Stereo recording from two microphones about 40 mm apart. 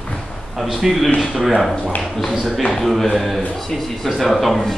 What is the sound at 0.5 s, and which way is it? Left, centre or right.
A man's voice, centre.